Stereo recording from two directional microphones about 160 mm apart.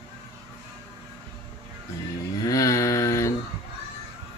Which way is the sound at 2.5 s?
20° left (ahead or behind).